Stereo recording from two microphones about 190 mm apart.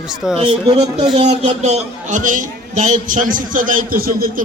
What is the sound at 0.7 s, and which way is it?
A man's voice, 30° right (ahead or behind).